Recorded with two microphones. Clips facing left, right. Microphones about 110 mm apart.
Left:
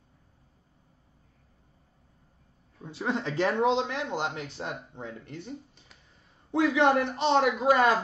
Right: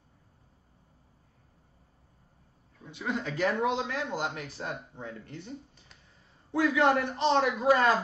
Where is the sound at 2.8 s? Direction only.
35° left (ahead or behind).